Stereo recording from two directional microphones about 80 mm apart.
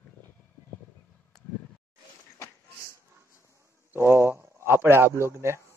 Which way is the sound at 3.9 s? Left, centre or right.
Right.